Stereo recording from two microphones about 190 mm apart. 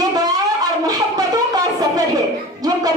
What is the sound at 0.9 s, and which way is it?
Wind instrument, 20° right (ahead or behind).